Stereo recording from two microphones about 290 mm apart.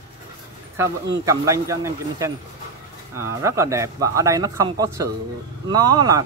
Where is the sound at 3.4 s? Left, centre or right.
Centre.